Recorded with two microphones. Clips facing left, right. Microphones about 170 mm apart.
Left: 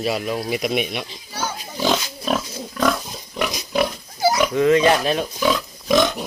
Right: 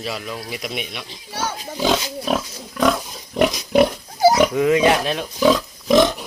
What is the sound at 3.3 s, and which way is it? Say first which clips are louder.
Pig: right 7 dB; 30° right (ahead or behind).